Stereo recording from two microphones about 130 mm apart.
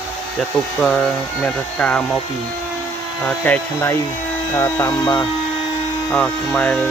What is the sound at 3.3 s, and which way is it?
Speech, 10° left (ahead or behind).